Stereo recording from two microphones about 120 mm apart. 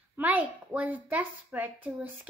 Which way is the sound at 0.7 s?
10° right (ahead or behind).